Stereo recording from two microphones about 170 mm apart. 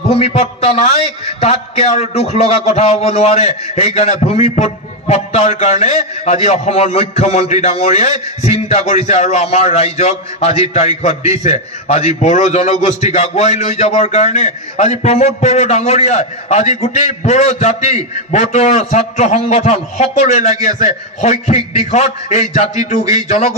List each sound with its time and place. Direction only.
0.1 s a man's voice: 35° left (ahead or behind)